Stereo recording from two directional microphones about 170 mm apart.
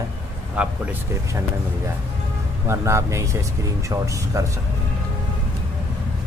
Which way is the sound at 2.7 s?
15° right (ahead or behind).